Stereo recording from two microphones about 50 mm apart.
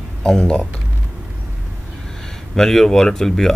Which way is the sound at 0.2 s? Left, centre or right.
Centre.